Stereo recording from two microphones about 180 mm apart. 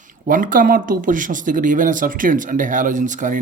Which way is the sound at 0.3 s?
50° right (ahead or behind).